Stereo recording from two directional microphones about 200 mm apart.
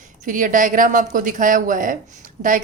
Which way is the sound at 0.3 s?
40° right (ahead or behind).